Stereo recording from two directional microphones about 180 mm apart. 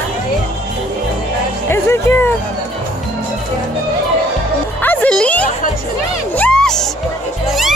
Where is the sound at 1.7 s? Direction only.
15° left (ahead or behind).